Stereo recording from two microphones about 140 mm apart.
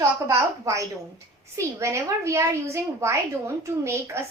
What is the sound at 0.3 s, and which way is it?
A woman's voice, 20° right (ahead or behind).